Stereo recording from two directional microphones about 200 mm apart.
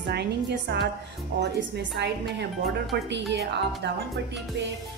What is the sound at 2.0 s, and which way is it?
Speech, 55° right (ahead or behind).